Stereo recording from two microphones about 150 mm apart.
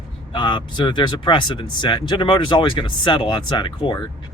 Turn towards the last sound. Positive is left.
turn(degrees=30)  # may be behind; listen again after turning